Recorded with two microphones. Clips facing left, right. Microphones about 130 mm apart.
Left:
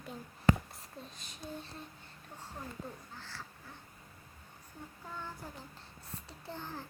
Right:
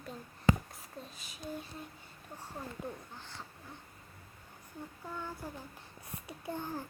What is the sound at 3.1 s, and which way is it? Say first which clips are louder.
Speech: even; 20° right (ahead or behind).